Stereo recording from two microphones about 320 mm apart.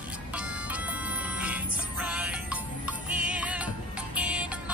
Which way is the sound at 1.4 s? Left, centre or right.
Centre.